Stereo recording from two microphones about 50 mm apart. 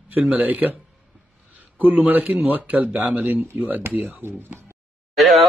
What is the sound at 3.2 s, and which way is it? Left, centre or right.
Speech, right.